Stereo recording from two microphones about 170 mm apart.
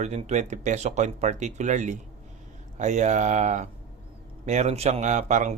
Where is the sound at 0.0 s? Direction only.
40° right (ahead or behind).